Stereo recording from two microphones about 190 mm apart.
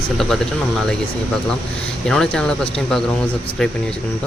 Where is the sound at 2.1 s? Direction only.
5° left (ahead or behind).